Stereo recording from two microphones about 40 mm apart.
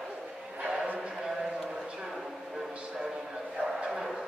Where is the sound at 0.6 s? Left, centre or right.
Centre.